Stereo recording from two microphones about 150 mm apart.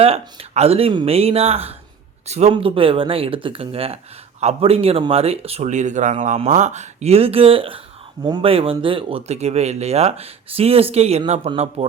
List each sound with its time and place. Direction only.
0.0 s speech: 45° right (ahead or behind)